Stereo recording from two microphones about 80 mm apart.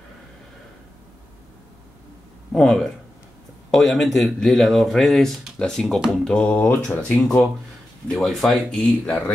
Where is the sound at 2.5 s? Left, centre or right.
Centre.